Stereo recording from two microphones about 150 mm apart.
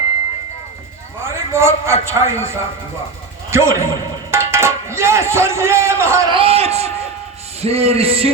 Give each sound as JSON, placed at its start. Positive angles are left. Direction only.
{"t": 1.2, "sound": "a man's voice", "side_deg": -15}
{"t": 6.3, "sound": "a man's voice", "side_deg": -40}